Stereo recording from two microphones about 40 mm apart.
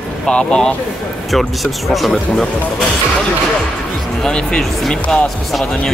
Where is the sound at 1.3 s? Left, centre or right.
Centre.